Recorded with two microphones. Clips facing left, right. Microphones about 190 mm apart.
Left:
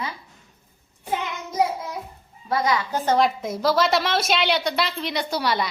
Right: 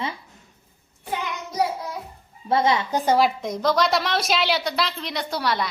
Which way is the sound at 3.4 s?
5° left (ahead or behind).